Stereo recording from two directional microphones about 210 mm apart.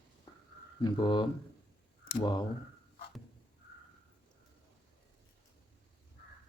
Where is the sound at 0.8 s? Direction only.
20° left (ahead or behind).